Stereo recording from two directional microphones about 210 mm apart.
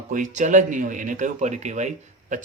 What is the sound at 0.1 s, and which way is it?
Speech, 35° right (ahead or behind).